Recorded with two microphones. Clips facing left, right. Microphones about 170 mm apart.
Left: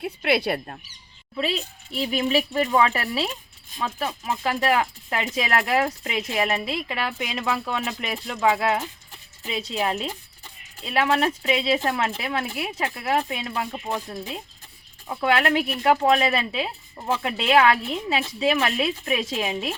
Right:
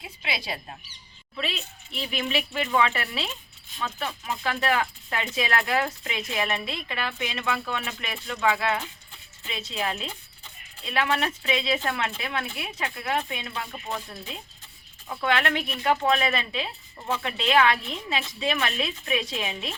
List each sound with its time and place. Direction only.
0.0 s speech: 60° left (ahead or behind)
1.4 s speech: 35° left (ahead or behind)
12.2 s speech: 30° left (ahead or behind)